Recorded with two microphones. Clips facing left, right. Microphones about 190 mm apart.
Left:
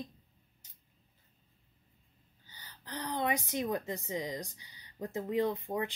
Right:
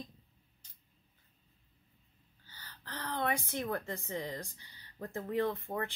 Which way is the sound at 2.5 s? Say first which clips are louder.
Left 3 dB; 15° left (ahead or behind).